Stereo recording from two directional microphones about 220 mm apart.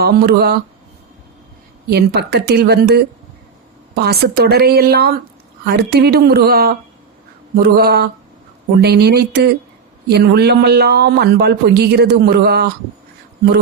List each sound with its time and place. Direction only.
0.0 s a man's voice: 45° right (ahead or behind)
1.9 s a man's voice: 50° right (ahead or behind)